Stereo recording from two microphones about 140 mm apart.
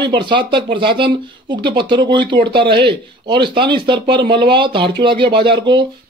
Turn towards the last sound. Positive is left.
turn(degrees=-35)  # may be behind; listen again after turning